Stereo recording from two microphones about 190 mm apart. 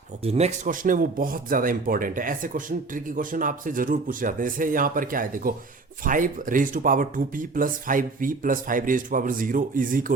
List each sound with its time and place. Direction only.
0.3 s speech: 35° right (ahead or behind)